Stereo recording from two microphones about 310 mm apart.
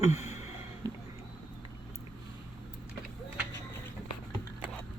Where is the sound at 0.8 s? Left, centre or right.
Centre.